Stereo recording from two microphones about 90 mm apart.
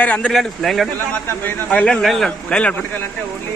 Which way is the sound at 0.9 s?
20° left (ahead or behind).